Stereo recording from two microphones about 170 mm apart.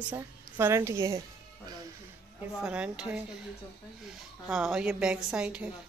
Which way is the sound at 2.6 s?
5° right (ahead or behind).